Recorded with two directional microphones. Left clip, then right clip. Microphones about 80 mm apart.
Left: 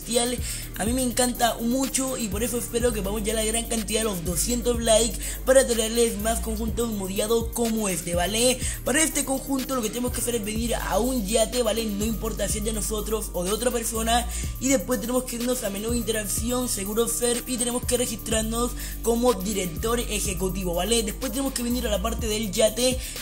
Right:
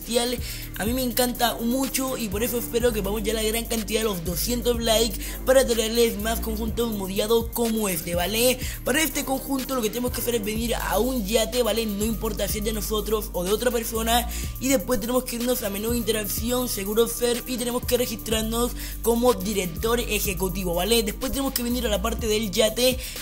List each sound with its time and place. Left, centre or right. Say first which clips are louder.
0.1 s music: right 1 dB; centre
11.2 s music: even; centre
13.4 s music: right 1 dB; centre; by 15.2 s right
15.5 s speech: right 1 dB; right
17.5 s music: right 2 dB; centre
19.4 s speech: right 2 dB; centre